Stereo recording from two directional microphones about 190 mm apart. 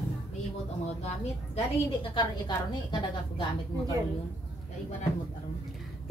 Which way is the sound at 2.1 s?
25° left (ahead or behind).